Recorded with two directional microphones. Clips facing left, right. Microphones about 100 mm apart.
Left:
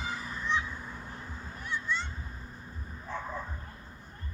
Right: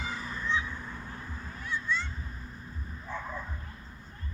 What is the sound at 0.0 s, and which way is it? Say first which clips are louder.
Crow: even; 5° left (ahead or behind).